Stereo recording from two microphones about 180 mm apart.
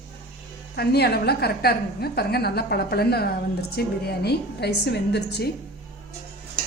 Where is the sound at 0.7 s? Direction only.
65° left (ahead or behind).